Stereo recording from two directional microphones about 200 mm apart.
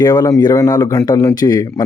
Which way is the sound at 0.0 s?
20° left (ahead or behind).